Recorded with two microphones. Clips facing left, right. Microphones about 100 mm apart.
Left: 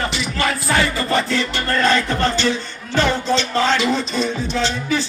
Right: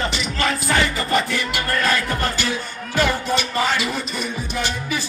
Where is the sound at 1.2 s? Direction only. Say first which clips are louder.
Left 3 dB; 15° right (ahead or behind).